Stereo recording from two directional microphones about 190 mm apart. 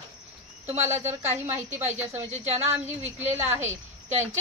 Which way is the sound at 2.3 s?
35° right (ahead or behind).